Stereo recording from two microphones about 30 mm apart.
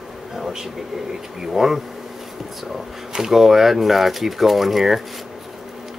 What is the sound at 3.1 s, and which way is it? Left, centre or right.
Speech, centre.